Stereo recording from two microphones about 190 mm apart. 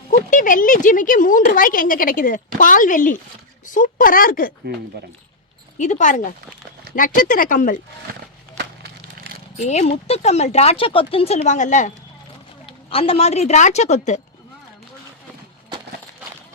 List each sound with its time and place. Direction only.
0.1 s speech: 40° left (ahead or behind)
5.7 s speech: 40° left (ahead or behind)
8.5 s wood: 60° right (ahead or behind)
9.6 s speech: 35° left (ahead or behind)
12.6 s speech: 30° left (ahead or behind)